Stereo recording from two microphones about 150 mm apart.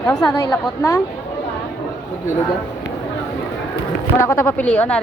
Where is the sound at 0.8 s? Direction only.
20° left (ahead or behind).